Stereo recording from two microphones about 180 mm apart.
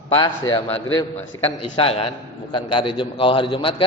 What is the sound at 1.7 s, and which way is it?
A man's voice, 30° left (ahead or behind).